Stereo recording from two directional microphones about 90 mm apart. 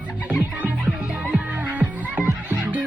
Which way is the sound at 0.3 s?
20° right (ahead or behind).